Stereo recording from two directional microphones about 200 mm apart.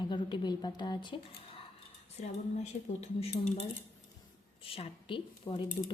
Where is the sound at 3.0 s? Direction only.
35° left (ahead or behind).